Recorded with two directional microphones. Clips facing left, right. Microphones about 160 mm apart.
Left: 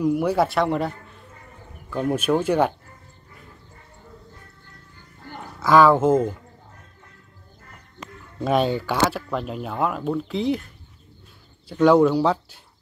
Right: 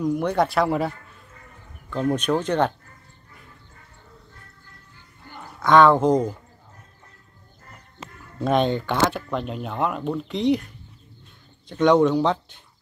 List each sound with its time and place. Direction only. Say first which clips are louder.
0.0 s speech: left 2 dB; 5° left (ahead or behind)
5.6 s speech: even; 5° left (ahead or behind)
8.0 s a sound: left 1 dB; 30° right (ahead or behind)
8.4 s speech: even; 5° left (ahead or behind)
11.7 s speech: left 1 dB; 5° left (ahead or behind)